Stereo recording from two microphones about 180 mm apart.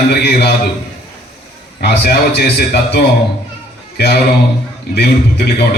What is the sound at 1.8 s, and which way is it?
A man's voice, 60° left (ahead or behind).